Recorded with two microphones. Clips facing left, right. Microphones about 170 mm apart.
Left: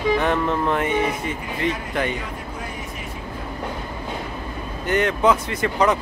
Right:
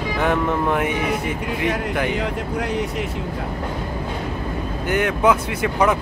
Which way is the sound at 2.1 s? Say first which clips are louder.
Right 7 dB; 75° right (ahead or behind).